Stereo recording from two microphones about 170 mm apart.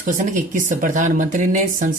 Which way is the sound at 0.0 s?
50° right (ahead or behind).